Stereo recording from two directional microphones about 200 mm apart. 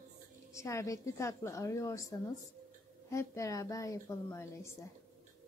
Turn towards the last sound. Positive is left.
turn(degrees=15)  # may be behind; listen again after turning